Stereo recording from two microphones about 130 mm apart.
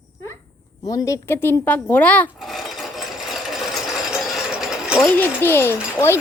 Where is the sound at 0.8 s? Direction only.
25° left (ahead or behind); by 2.3 s 10° left (ahead or behind).